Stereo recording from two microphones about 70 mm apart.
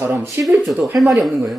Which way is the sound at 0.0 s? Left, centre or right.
Right.